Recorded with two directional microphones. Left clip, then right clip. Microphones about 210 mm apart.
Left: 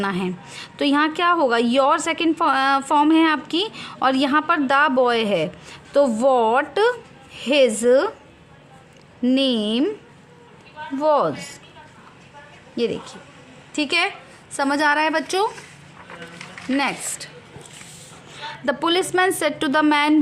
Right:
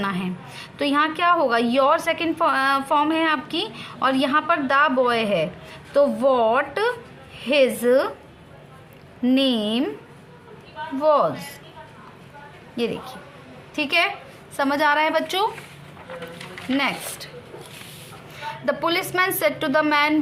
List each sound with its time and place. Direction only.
0.0 s a woman's voice: 45° left (ahead or behind)
9.2 s a woman's voice: 45° left (ahead or behind)
10.9 s a woman's voice: 40° left (ahead or behind)
12.7 s a woman's voice: 40° left (ahead or behind)
16.7 s a woman's voice: 45° left (ahead or behind)
18.3 s a woman's voice: 45° left (ahead or behind)